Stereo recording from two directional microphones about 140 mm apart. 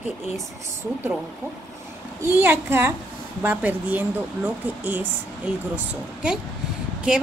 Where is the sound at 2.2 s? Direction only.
15° right (ahead or behind).